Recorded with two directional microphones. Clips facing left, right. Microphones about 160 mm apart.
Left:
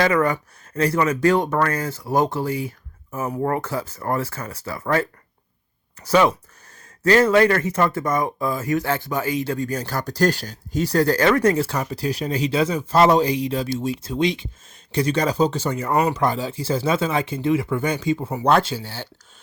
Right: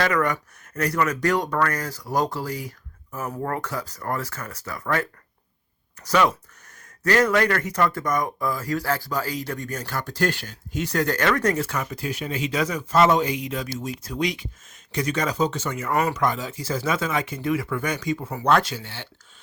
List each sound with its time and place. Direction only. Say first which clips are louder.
0.0 s speech: left 4 dB; 30° left (ahead or behind)